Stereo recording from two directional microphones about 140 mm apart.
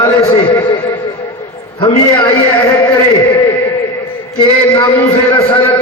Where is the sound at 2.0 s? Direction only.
30° left (ahead or behind).